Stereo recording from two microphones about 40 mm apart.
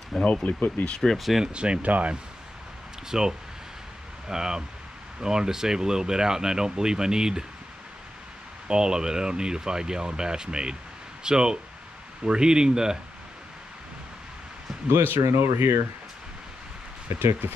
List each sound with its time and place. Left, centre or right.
0.2 s speech: left
0.5 s speech: left
1.0 s speech: centre
1.4 s speech: right
1.8 s speech: right
3.1 s speech: centre
8.6 s speech: centre
14.9 s speech: right
17.2 s speech: right